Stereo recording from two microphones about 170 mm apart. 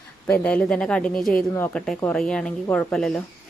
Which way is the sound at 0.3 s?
10° left (ahead or behind).